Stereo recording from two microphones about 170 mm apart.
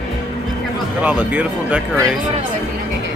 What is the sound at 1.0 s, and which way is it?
Speech, 10° right (ahead or behind).